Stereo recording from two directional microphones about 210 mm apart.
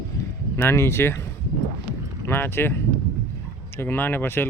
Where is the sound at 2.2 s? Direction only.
10° left (ahead or behind).